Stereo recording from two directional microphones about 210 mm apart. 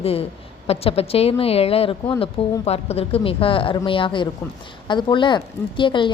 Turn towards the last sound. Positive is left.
turn(degrees=25)  # may be behind; listen again after turning